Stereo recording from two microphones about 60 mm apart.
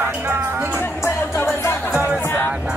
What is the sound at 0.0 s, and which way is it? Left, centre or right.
Music, right.